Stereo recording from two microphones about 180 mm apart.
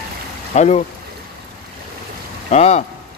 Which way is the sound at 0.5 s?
40° left (ahead or behind).